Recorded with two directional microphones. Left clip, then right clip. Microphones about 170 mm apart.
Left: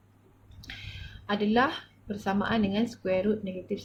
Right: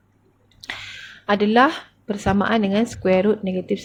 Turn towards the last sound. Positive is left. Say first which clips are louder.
# right 10 dB
turn(degrees=-50)  # may be behind; listen again after turning